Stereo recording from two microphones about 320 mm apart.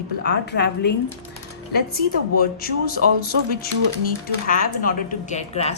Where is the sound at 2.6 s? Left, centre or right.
Left.